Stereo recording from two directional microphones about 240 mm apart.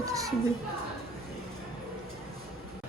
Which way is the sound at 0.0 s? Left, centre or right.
Centre.